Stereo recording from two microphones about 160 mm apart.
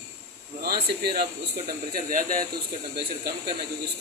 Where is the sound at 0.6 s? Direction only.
70° right (ahead or behind).